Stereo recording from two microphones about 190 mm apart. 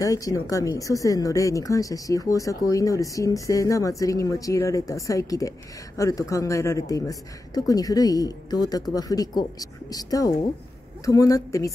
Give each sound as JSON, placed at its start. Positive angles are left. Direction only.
{"t": 0.0, "sound": "speech", "side_deg": 20}